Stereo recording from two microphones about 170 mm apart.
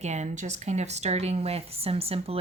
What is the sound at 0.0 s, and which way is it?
Speech, 40° right (ahead or behind).